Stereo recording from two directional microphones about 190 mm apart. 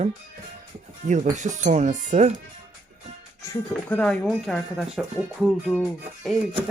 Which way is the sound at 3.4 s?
10° left (ahead or behind).